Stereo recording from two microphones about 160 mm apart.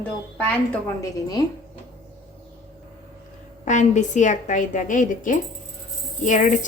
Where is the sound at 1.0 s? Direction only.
25° left (ahead or behind).